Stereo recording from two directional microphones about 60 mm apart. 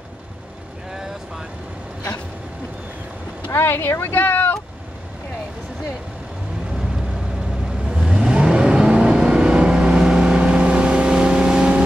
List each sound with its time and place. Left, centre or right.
3.5 s speech: left
7.8 s vehicle: centre